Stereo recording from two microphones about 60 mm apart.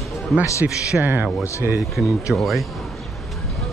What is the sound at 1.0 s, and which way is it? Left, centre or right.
Speech, right.